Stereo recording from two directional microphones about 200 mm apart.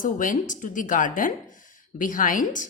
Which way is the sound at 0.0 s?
40° left (ahead or behind).